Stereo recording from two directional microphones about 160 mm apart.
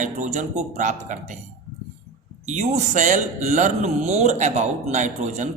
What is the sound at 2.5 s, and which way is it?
Speech, 45° right (ahead or behind).